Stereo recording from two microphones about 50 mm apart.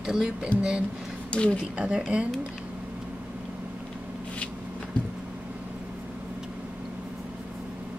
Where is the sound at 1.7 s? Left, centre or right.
Right.